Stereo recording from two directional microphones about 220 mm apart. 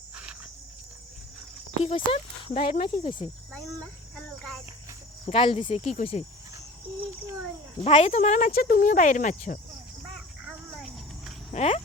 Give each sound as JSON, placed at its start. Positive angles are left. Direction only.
{"t": 1.8, "sound": "speech", "side_deg": 25}
{"t": 2.6, "sound": "speech", "side_deg": 40}
{"t": 2.8, "sound": "speech", "side_deg": 20}
{"t": 3.8, "sound": "cricket", "side_deg": 5}
{"t": 5.2, "sound": "speech", "side_deg": 25}
{"t": 7.9, "sound": "speech", "side_deg": 30}
{"t": 10.8, "sound": "a sound", "side_deg": 0}
{"t": 11.5, "sound": "speech", "side_deg": 30}